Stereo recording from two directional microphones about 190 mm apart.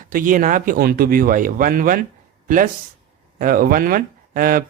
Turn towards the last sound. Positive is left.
turn(degrees=-50)  # may be behind; listen again after turning